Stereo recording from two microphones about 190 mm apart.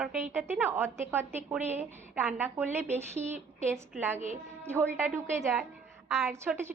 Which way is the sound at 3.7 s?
10° right (ahead or behind).